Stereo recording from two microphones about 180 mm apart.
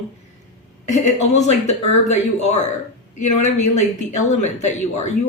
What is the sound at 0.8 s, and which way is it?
Speech, 40° left (ahead or behind).